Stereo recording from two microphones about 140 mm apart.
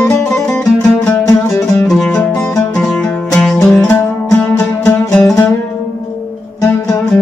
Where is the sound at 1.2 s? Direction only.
20° left (ahead or behind).